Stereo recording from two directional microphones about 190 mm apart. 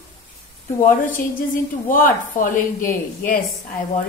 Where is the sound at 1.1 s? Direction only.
45° left (ahead or behind).